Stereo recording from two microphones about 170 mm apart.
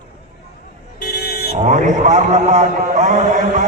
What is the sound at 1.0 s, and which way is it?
Vehicle, 65° left (ahead or behind).